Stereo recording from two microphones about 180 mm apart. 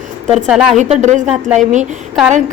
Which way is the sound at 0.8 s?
40° right (ahead or behind).